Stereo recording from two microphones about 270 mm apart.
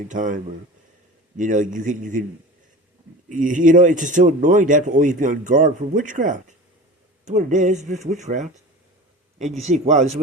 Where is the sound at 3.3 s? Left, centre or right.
Right.